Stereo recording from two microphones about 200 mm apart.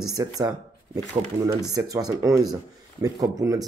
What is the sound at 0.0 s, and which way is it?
Speech, 20° right (ahead or behind).